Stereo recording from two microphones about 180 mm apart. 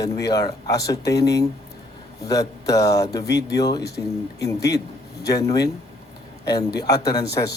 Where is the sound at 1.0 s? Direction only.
65° left (ahead or behind).